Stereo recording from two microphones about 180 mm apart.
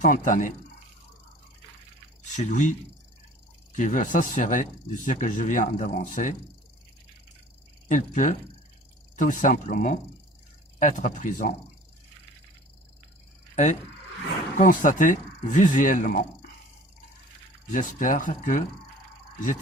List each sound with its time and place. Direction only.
0.0 s speech: 45° left (ahead or behind)
2.3 s speech: 40° left (ahead or behind)
3.8 s speech: 45° left (ahead or behind)
7.9 s speech: 45° left (ahead or behind)
14.6 s speech: 45° left (ahead or behind)
17.7 s speech: 45° left (ahead or behind)